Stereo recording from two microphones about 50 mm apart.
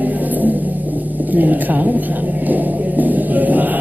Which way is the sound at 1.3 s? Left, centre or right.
Right.